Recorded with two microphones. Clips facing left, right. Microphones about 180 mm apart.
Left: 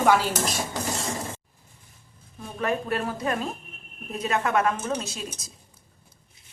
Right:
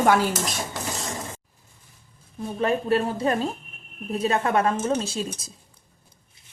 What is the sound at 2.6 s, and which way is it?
A woman's voice, 30° right (ahead or behind).